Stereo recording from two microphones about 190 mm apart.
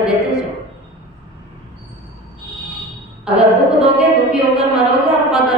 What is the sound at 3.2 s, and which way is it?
A woman's voice, 5° right (ahead or behind).